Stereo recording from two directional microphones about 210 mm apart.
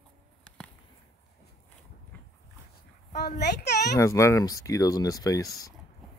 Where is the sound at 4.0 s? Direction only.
15° left (ahead or behind).